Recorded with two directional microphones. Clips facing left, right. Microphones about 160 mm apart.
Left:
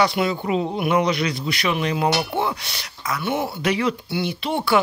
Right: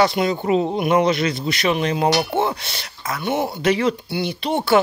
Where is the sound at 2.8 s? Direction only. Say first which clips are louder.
Left 1 dB; 50° right (ahead or behind).